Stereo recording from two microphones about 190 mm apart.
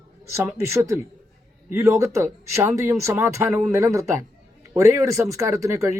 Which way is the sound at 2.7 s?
15° right (ahead or behind).